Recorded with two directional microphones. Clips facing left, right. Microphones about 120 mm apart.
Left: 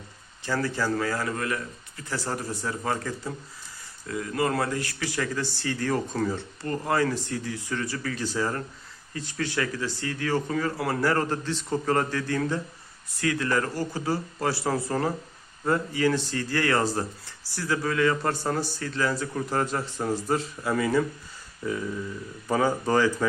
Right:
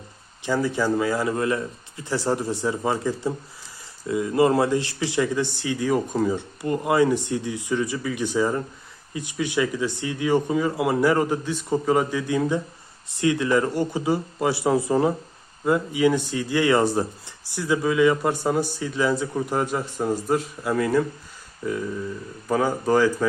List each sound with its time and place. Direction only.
0.4 s speech: 15° right (ahead or behind)